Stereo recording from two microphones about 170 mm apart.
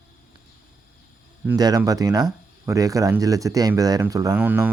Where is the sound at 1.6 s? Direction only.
20° right (ahead or behind).